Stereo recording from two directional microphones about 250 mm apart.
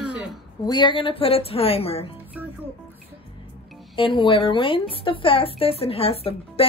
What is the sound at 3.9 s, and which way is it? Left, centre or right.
Speech, centre.